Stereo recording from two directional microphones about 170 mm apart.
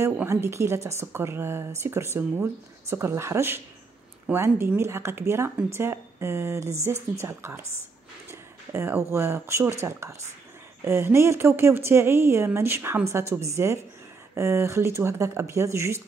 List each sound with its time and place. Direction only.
0.0 s speech: 15° right (ahead or behind)